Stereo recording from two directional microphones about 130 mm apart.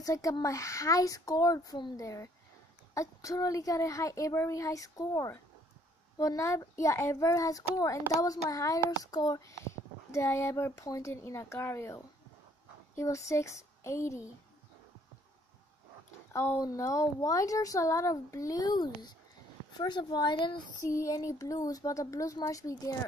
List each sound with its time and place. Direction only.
0.0 s a child's voice: 25° left (ahead or behind)
16.3 s a child's voice: 25° left (ahead or behind)
20.8 s a child's voice: 25° left (ahead or behind)